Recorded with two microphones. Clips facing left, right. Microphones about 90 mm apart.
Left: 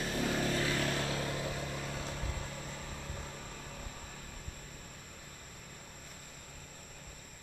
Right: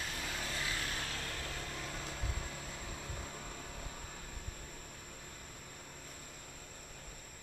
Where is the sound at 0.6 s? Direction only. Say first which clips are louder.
Left 7 dB; 40° left (ahead or behind).